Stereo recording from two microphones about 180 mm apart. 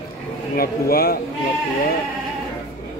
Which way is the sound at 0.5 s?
55° left (ahead or behind).